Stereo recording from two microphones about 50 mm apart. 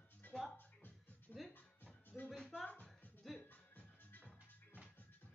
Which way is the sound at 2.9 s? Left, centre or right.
Centre.